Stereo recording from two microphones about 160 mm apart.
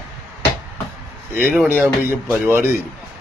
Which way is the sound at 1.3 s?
10° right (ahead or behind).